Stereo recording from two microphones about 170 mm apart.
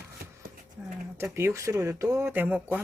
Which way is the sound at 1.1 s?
15° right (ahead or behind).